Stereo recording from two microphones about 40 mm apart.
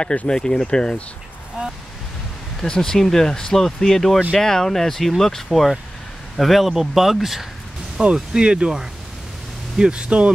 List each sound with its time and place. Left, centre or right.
0.0 s speech: left
2.6 s speech: centre
8.0 s speech: right